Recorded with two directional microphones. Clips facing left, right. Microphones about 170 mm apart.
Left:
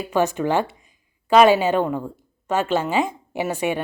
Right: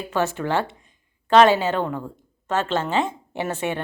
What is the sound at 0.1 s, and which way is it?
A woman's voice, 15° left (ahead or behind).